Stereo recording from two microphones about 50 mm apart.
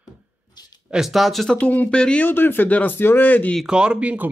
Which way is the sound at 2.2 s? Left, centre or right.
Left.